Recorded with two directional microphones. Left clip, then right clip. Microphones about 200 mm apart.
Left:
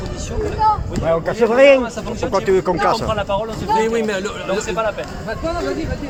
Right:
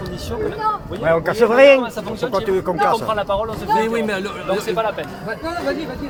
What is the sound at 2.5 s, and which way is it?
Speech, 30° left (ahead or behind).